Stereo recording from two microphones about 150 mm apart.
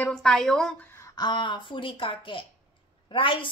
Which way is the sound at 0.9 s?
20° left (ahead or behind).